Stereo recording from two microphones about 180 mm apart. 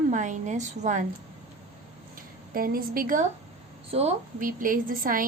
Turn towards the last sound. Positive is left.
turn(degrees=-50)  # may be behind; listen again after turning